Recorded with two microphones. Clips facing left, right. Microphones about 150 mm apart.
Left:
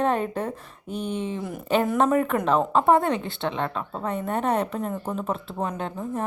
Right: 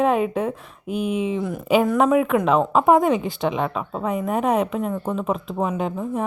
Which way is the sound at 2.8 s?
15° right (ahead or behind).